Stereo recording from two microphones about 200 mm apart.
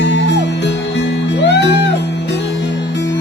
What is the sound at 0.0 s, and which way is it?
Music, 60° left (ahead or behind).